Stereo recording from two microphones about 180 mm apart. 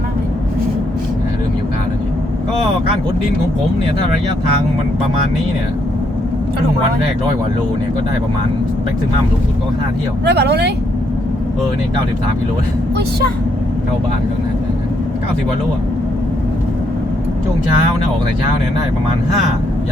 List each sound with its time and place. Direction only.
10.2 s speech: 65° right (ahead or behind)